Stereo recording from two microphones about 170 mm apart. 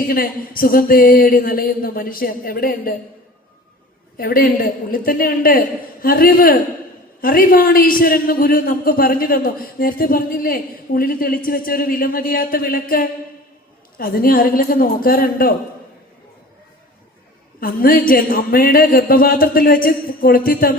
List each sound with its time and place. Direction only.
0.1 s a man's voice: 60° left (ahead or behind)
4.2 s a man's voice: 60° left (ahead or behind)
17.6 s a man's voice: 60° left (ahead or behind)